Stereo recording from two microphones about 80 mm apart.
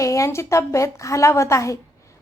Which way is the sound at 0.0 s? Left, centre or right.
Left.